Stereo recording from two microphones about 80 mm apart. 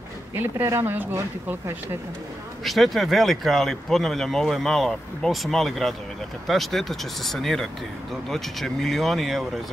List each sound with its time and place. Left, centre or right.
0.3 s speech: right
2.6 s speech: centre